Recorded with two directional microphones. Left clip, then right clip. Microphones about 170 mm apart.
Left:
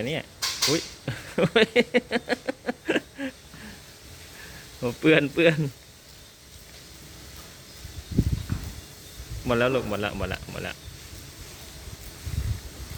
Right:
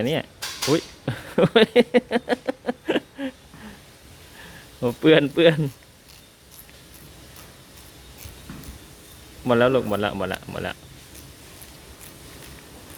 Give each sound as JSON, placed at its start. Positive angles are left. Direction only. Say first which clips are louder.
{"t": 0.0, "sound": "cutlery", "louder": "right 6 dB", "side_deg": -35}
{"t": 0.7, "sound": "speech", "louder": "right 4 dB", "side_deg": -30}
{"t": 4.8, "sound": "speech", "louder": "right 4 dB", "side_deg": -20}
{"t": 9.5, "sound": "speech", "louder": "right 5 dB", "side_deg": -25}